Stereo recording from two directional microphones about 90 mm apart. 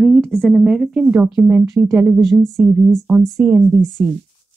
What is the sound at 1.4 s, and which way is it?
Speech, 20° right (ahead or behind).